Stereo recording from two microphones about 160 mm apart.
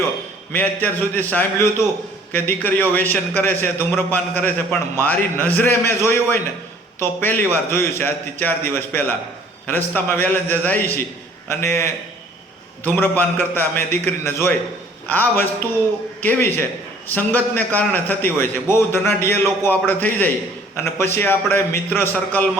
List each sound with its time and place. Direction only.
0.5 s a man's voice: 10° left (ahead or behind)